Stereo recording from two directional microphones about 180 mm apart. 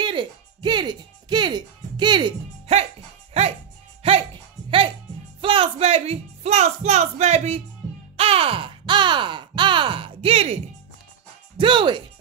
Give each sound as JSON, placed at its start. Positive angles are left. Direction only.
{"t": 0.0, "sound": "music", "side_deg": -25}
{"t": 4.0, "sound": "music", "side_deg": -30}
{"t": 8.2, "sound": "a sound", "side_deg": -30}
{"t": 11.5, "sound": "music", "side_deg": -30}